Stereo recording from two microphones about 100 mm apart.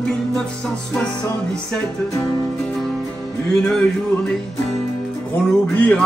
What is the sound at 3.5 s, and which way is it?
Music, 10° left (ahead or behind).